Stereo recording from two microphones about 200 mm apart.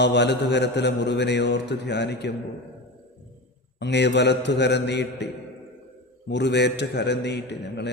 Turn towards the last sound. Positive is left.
turn(degrees=60)  # may be behind; listen again after turning